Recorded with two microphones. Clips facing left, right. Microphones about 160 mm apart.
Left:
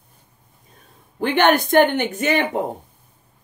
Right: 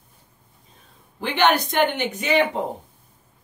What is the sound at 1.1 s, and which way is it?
Speech, 50° left (ahead or behind).